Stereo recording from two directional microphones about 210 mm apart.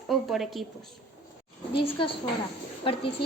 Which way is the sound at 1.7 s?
25° left (ahead or behind).